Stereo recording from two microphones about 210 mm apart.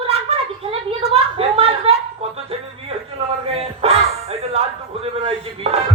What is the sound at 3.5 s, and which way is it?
Music, 30° right (ahead or behind).